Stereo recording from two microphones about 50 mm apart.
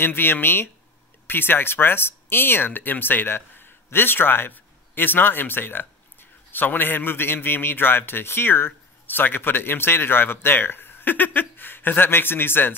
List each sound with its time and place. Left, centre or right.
0.0 s a man's voice: left